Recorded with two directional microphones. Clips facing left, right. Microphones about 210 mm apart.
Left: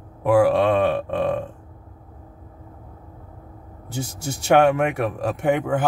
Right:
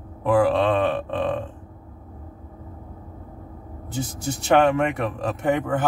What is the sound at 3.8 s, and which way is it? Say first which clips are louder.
Speech: right 1 dB; 10° left (ahead or behind).